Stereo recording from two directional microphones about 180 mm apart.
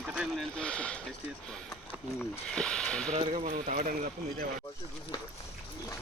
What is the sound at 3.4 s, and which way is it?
Speech, 50° right (ahead or behind).